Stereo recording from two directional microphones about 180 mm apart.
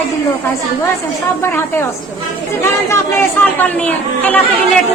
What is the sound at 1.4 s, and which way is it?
Speech, 15° left (ahead or behind).